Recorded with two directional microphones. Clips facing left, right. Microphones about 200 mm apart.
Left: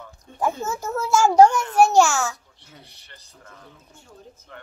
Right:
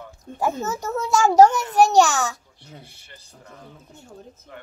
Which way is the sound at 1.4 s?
20° right (ahead or behind).